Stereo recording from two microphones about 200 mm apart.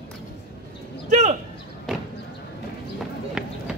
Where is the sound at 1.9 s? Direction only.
Centre (ahead or behind).